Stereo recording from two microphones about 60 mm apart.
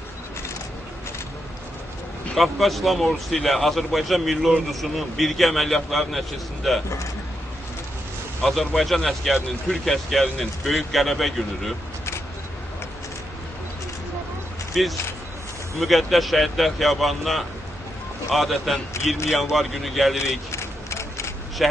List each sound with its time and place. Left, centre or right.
2.3 s speech: centre
8.4 s speech: centre
14.7 s speech: centre
20.5 s a sound: left
21.6 s speech: centre